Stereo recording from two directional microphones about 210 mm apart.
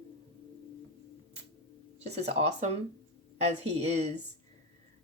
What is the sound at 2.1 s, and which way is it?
Speech, 30° right (ahead or behind).